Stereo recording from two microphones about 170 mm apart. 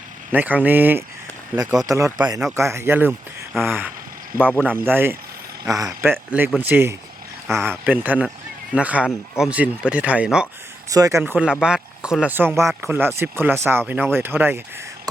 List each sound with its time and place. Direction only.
0.3 s speech: 10° right (ahead or behind)
3.1 s speech: centre (ahead or behind)
3.7 s speech: 10° right (ahead or behind)
10.8 s speech: 20° right (ahead or behind)